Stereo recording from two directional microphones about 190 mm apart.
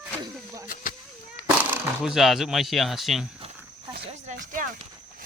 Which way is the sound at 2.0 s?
Centre (ahead or behind).